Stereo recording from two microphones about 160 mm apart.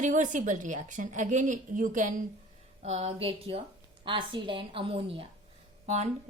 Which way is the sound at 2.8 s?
40° right (ahead or behind).